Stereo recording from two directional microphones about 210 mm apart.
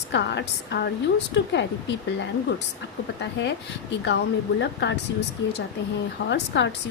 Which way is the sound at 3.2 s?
55° left (ahead or behind).